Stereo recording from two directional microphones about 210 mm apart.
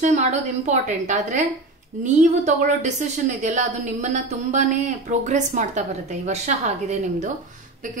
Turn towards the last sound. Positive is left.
turn(degrees=-40)  # may be behind; listen again after turning